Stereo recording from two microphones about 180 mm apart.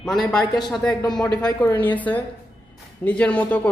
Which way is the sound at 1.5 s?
20° left (ahead or behind).